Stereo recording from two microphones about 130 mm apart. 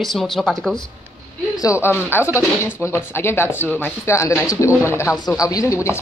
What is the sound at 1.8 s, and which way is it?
Speech, 20° left (ahead or behind).